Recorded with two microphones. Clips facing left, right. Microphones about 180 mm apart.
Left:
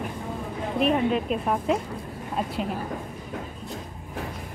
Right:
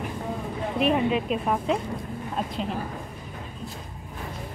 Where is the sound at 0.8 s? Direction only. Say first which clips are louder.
Even; centre (ahead or behind).